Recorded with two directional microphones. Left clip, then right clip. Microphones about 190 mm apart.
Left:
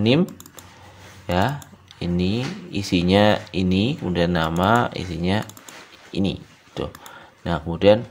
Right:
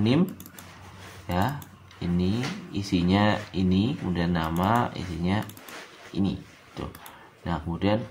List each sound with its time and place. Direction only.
1.2 s speech: 40° left (ahead or behind)